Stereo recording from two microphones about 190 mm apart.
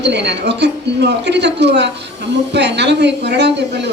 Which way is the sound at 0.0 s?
65° right (ahead or behind).